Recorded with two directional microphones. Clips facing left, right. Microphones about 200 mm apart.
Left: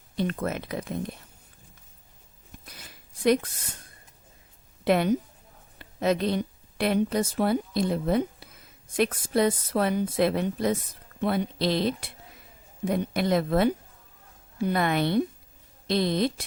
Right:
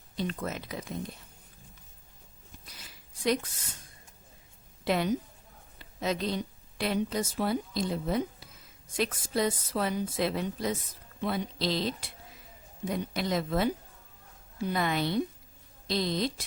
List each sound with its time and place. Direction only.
0.2 s a woman's voice: 55° left (ahead or behind)
2.7 s a sound: 55° left (ahead or behind)
4.9 s a woman's voice: 55° left (ahead or behind)